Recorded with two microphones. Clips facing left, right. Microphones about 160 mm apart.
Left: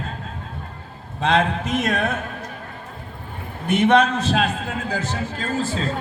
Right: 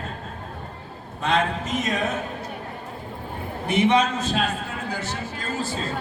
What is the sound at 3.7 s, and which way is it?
A man's voice, 55° left (ahead or behind).